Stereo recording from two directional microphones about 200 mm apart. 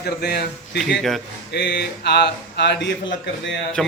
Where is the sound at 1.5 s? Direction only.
55° left (ahead or behind).